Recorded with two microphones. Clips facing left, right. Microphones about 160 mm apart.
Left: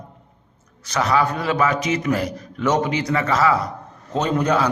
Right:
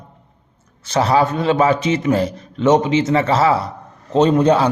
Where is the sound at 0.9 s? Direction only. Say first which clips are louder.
Right 4 dB; 30° right (ahead or behind).